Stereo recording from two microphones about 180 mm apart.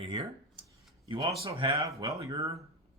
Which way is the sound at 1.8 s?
20° right (ahead or behind).